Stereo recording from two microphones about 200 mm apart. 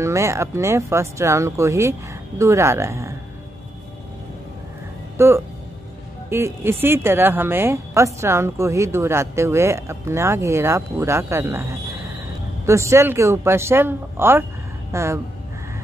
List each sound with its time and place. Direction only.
0.0 s a woman's voice: 15° right (ahead or behind)
5.1 s a woman's voice: 15° right (ahead or behind)
12.6 s a woman's voice: 15° right (ahead or behind)